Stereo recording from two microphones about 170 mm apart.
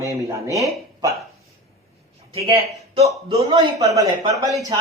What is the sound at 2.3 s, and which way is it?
Speech, 35° right (ahead or behind).